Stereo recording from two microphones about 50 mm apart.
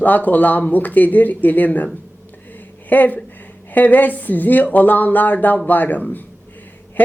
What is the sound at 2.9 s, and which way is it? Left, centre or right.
Speech, left.